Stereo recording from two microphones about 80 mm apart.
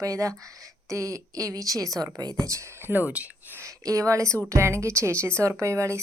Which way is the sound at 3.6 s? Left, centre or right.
Right.